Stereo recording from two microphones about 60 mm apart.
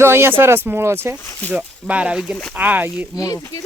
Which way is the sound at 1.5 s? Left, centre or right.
Right.